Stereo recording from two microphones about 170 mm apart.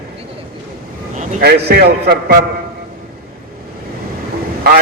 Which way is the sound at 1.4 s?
70° right (ahead or behind).